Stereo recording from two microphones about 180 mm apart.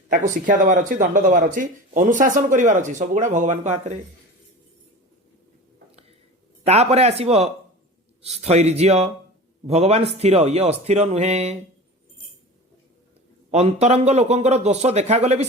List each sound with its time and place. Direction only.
0.1 s speech: 45° right (ahead or behind)
6.7 s speech: 35° right (ahead or behind)
13.5 s speech: 40° right (ahead or behind)